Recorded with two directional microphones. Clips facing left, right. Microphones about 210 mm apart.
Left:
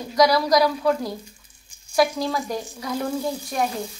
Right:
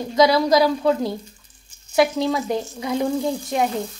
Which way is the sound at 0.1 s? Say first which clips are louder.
Right 2 dB; 25° right (ahead or behind).